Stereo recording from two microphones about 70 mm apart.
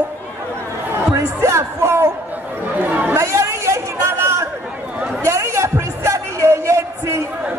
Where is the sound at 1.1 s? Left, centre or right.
Right.